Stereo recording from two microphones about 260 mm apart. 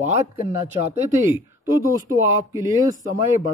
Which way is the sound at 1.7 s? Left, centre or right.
Centre.